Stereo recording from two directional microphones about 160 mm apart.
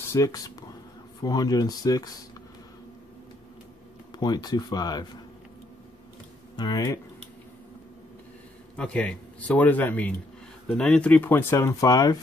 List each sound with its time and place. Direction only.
0.1 s speech: 20° left (ahead or behind)
4.1 s speech: 25° left (ahead or behind)
6.5 s speech: 25° left (ahead or behind)
8.7 s speech: 5° left (ahead or behind)